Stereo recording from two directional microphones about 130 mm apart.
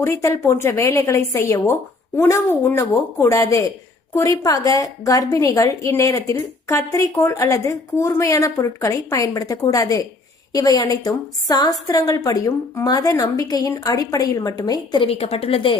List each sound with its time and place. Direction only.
0.0 s a woman's voice: 20° left (ahead or behind)
15.0 s a woman's voice: 50° left (ahead or behind)